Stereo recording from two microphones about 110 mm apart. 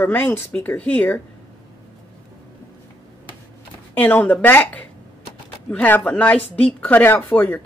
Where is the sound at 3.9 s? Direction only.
15° left (ahead or behind).